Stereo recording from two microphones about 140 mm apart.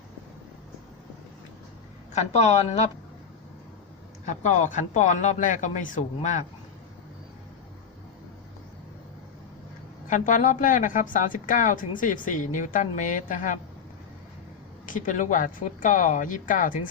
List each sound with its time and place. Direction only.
2.1 s speech: 50° left (ahead or behind)
4.3 s speech: 60° left (ahead or behind)
10.1 s a woman's voice: 65° left (ahead or behind)
14.8 s a woman's voice: 70° left (ahead or behind)